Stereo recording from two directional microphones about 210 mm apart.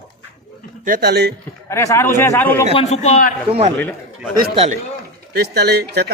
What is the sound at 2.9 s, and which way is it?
Speech, 30° left (ahead or behind).